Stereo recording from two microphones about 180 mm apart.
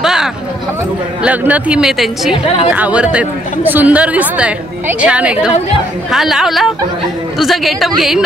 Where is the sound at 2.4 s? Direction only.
30° left (ahead or behind).